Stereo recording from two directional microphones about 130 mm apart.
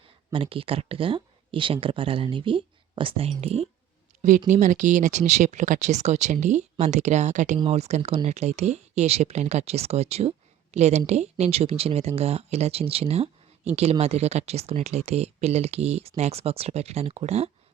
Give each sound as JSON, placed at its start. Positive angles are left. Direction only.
{"t": 0.3, "sound": "speech", "side_deg": -45}
{"t": 4.2, "sound": "speech", "side_deg": -75}
{"t": 7.6, "sound": "speech", "side_deg": -55}